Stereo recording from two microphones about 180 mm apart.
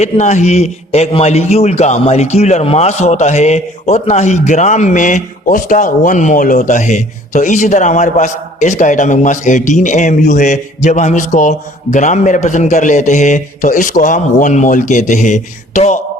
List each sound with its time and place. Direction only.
0.0 s a man's voice: 40° left (ahead or behind)